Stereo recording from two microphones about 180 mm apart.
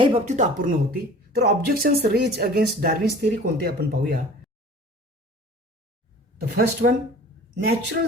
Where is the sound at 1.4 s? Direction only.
60° right (ahead or behind).